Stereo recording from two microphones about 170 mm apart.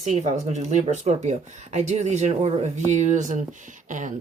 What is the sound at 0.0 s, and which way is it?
Speech, 45° right (ahead or behind).